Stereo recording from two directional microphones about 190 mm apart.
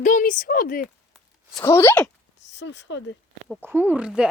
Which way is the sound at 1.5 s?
10° left (ahead or behind).